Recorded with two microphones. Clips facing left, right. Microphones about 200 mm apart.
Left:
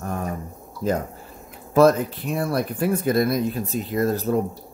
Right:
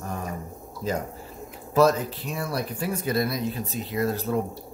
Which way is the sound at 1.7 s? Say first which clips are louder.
Left 4 dB; 55° left (ahead or behind).